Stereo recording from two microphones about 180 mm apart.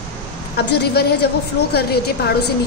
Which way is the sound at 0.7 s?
65° left (ahead or behind).